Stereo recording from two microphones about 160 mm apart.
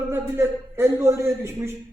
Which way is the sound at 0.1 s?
15° right (ahead or behind).